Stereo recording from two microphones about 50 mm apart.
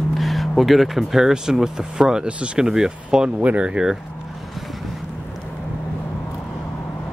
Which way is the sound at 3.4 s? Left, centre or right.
Right.